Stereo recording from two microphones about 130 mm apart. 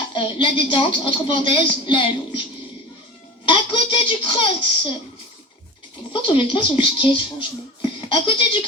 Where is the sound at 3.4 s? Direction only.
40° left (ahead or behind).